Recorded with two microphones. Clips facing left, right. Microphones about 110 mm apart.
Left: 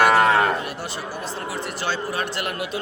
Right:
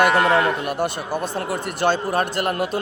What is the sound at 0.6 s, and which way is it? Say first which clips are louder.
A man's voice: right 7 dB; 55° right (ahead or behind).